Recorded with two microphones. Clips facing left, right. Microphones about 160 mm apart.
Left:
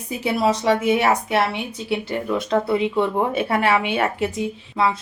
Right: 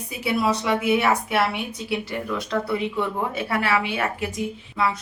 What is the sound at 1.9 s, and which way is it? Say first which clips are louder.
Speech: left 5 dB; 25° left (ahead or behind).